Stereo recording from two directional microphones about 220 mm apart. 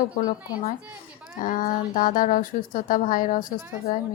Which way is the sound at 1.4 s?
35° left (ahead or behind).